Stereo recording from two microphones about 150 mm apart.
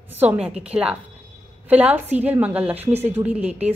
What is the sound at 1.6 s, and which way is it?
A woman's voice, 10° right (ahead or behind).